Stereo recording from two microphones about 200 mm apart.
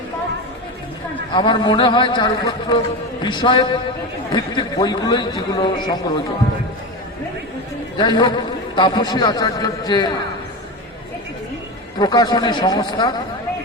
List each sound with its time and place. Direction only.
1.3 s a man's voice: 25° left (ahead or behind)
7.9 s a man's voice: 20° left (ahead or behind)
11.9 s a man's voice: 20° left (ahead or behind)